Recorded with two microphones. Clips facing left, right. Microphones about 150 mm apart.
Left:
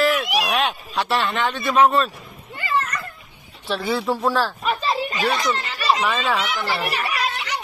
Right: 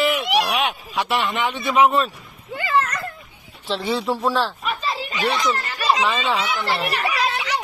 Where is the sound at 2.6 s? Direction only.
90° right.